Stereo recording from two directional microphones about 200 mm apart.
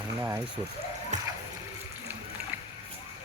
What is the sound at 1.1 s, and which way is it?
Water, 35° right (ahead or behind).